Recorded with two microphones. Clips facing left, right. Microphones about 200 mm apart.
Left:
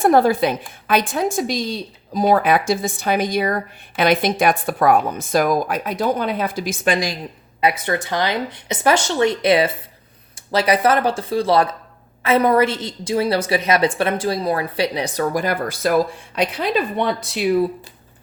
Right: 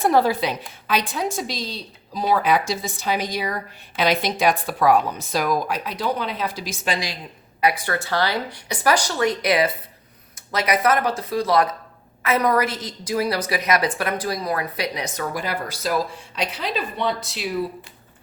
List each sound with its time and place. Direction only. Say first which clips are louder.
0.0 s a woman's voice: left 4 dB; 50° left (ahead or behind)
7.6 s a woman's voice: left 2 dB; 20° left (ahead or behind); by 17.5 s 55° left (ahead or behind)